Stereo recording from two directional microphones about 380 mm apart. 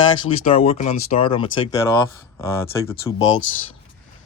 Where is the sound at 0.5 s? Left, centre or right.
Centre.